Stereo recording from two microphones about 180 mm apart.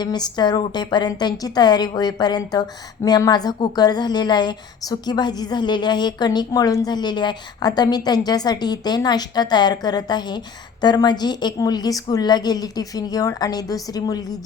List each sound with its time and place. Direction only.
0.0 s a woman's voice: 25° left (ahead or behind)